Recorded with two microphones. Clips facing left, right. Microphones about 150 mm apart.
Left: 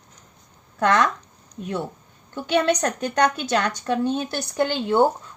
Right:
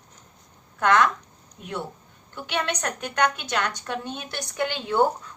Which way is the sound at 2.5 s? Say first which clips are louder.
Left 8 dB; 35° left (ahead or behind).